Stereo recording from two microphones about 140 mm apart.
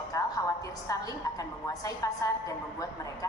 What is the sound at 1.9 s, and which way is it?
Speech, 25° left (ahead or behind).